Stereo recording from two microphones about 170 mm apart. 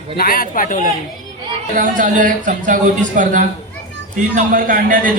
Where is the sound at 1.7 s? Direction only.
50° right (ahead or behind).